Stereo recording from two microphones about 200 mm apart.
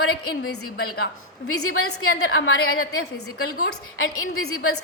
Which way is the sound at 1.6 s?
90° left.